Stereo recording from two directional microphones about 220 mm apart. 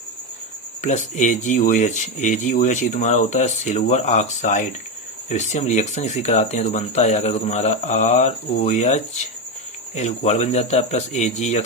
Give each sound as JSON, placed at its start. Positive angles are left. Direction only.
{"t": 0.8, "sound": "speech", "side_deg": 35}